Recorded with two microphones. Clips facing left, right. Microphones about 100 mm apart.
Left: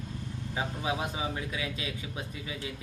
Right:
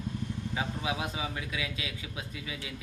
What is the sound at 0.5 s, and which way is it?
Speech, 30° left (ahead or behind).